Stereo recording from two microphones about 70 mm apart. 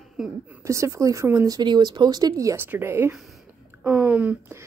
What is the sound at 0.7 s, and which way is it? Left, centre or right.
Speech, right.